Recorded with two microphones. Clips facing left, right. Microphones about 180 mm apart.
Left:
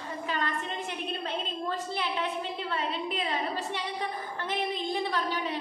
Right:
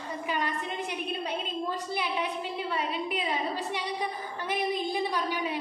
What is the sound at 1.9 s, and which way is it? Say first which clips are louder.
A woman's voice: even; 15° right (ahead or behind).